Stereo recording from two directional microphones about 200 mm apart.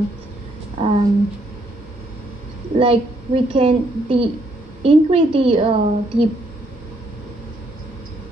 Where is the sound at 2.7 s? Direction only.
30° right (ahead or behind).